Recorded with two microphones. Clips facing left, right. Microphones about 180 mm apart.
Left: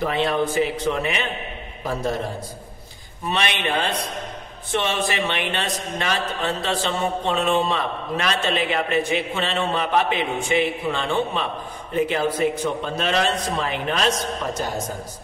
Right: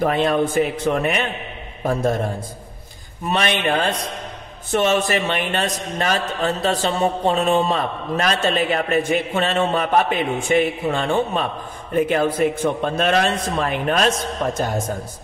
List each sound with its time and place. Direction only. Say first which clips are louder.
0.0 s a man's voice: right 3 dB; 50° right (ahead or behind)
3.3 s a man's voice: right 4 dB; 45° right (ahead or behind)